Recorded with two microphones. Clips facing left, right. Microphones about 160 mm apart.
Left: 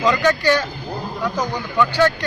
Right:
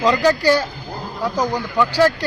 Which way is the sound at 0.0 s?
35° right (ahead or behind).